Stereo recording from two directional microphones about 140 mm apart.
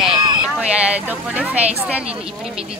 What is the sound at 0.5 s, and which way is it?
Speech, 10° right (ahead or behind).